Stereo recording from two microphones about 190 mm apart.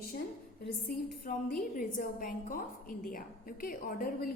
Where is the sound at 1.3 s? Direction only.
50° left (ahead or behind).